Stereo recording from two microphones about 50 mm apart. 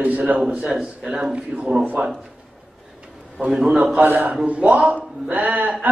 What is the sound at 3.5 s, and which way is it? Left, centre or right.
A man's voice, centre.